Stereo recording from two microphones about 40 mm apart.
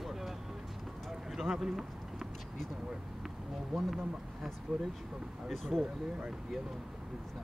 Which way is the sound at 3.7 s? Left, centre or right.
Centre.